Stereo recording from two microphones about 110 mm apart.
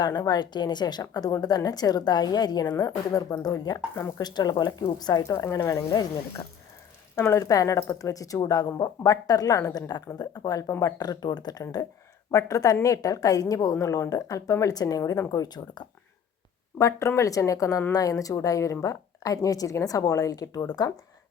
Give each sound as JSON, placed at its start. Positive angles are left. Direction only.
{"t": 0.0, "sound": "a woman's voice", "side_deg": 40}
{"t": 7.2, "sound": "a woman's voice", "side_deg": 25}
{"t": 16.7, "sound": "a woman's voice", "side_deg": 25}